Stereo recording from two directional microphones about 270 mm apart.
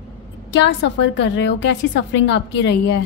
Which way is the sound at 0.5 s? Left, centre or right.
Left.